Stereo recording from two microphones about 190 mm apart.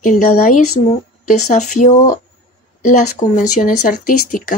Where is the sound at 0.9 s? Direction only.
40° left (ahead or behind).